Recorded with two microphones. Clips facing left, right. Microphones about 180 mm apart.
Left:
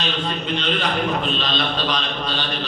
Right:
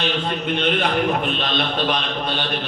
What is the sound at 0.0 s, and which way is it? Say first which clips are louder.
A man's voice: right 2 dB; 60° right (ahead or behind).